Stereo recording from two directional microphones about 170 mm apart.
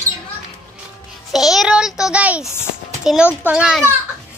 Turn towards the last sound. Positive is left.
turn(degrees=-5)  # may be behind; listen again after turning